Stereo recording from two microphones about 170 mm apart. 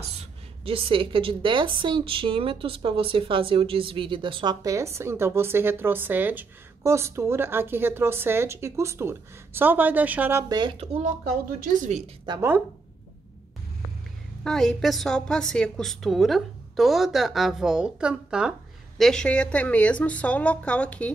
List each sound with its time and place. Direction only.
0.2 s a woman's voice: 30° right (ahead or behind); by 10.4 s 10° right (ahead or behind)
10.5 s speech: 25° right (ahead or behind)
11.6 s a woman's voice: 45° right (ahead or behind)
12.3 s a woman's voice: 15° right (ahead or behind)
14.4 s a woman's voice: 5° left (ahead or behind)